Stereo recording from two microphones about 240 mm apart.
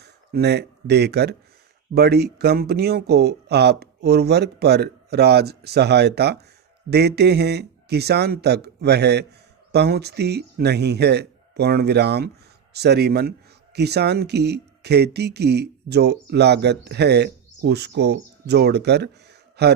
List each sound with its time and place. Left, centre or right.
0.0 s speech: right